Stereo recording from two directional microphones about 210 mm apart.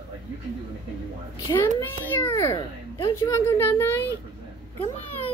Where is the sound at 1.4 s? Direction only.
10° left (ahead or behind).